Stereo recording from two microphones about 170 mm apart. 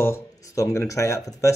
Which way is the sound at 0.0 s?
15° left (ahead or behind).